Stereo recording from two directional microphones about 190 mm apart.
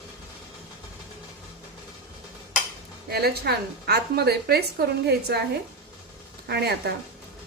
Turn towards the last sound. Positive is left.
turn(degrees=-60)  # may be behind; listen again after turning